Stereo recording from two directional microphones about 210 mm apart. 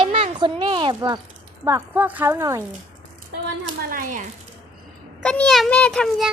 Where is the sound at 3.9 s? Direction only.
40° right (ahead or behind).